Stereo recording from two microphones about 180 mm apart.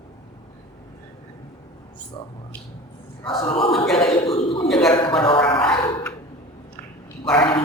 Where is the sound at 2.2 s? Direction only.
25° left (ahead or behind).